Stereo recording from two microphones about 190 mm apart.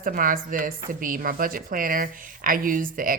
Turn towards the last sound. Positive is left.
turn(degrees=-45)  # may be behind; listen again after turning